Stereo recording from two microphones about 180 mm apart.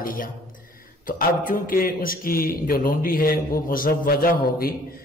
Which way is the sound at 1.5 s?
50° left (ahead or behind).